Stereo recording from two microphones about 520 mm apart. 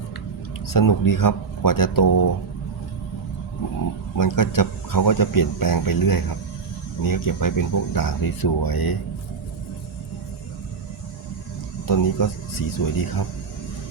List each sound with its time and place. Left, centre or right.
0.7 s speech: left
4.2 s speech: left
11.9 s speech: left